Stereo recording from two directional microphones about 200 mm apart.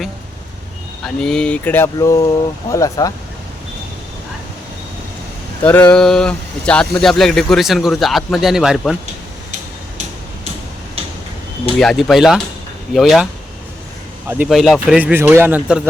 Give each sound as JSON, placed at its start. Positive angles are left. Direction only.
{"t": 1.0, "sound": "speech", "side_deg": 5}
{"t": 5.6, "sound": "speech", "side_deg": 5}
{"t": 11.8, "sound": "speech", "side_deg": 0}
{"t": 14.3, "sound": "speech", "side_deg": -5}